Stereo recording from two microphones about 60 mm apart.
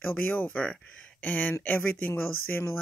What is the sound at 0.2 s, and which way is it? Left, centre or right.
Speech, left.